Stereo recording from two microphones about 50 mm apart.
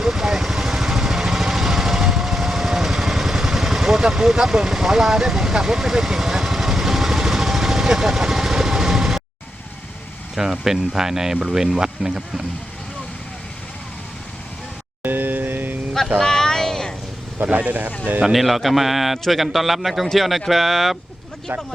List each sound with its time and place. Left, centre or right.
0.0 s vehicle: centre
10.3 s speech: centre
15.0 s a sound: right
16.2 s vehicle: centre
17.4 s speech: right
18.2 s a man's voice: centre